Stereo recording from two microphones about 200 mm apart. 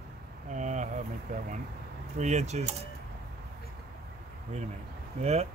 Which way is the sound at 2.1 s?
35° right (ahead or behind).